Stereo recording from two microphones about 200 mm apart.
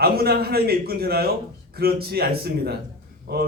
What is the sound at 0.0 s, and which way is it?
A man's voice, 50° right (ahead or behind).